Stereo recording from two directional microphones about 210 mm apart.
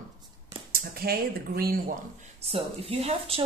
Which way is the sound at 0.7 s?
45° right (ahead or behind).